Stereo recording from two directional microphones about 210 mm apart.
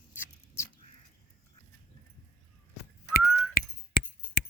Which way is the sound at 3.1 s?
45° left (ahead or behind).